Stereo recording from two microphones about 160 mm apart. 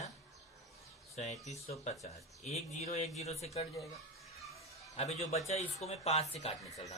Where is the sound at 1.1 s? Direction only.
45° left (ahead or behind).